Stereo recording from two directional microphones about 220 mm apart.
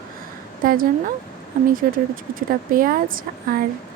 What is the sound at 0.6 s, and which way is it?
Speech, 40° right (ahead or behind).